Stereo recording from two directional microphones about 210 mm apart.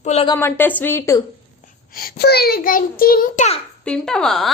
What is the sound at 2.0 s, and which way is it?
A child's voice, 45° left (ahead or behind).